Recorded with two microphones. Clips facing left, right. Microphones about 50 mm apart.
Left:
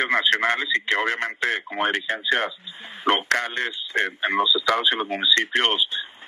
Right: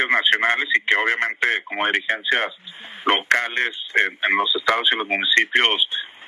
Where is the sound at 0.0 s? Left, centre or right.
Right.